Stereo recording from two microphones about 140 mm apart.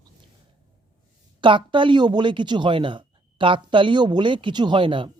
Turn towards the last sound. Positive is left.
turn(degrees=-35)  # may be behind; listen again after turning